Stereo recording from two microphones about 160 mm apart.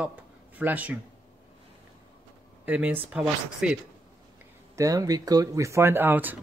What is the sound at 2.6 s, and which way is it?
Speech, 10° right (ahead or behind).